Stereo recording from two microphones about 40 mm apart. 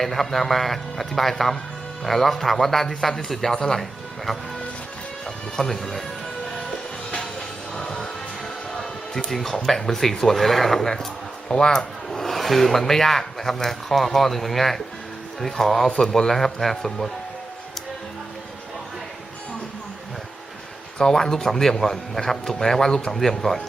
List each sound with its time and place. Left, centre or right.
0.0 s a man's voice: centre
5.2 s music: centre
7.8 s music: left
8.8 s a sound: centre
9.6 s a man's voice: centre
11.4 s a sound: left
12.2 s a man's voice: centre
21.0 s a man's voice: centre